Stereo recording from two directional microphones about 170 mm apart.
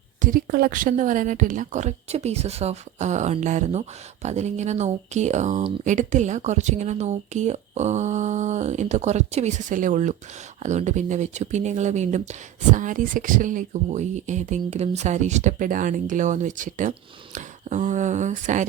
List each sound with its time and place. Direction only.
0.2 s speech: 55° right (ahead or behind)